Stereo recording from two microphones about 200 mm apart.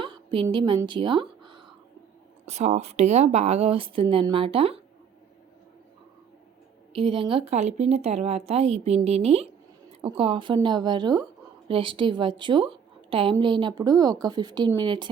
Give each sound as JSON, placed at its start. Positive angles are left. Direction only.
{"t": 0.0, "sound": "a sound", "side_deg": -25}
{"t": 0.4, "sound": "speech", "side_deg": -20}
{"t": 2.5, "sound": "speech", "side_deg": -35}
{"t": 6.9, "sound": "a woman's voice", "side_deg": -25}